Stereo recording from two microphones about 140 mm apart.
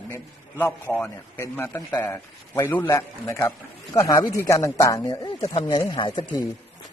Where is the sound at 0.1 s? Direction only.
20° left (ahead or behind).